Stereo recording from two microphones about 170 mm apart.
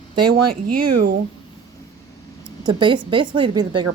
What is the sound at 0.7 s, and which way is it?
Speech, 65° right (ahead or behind).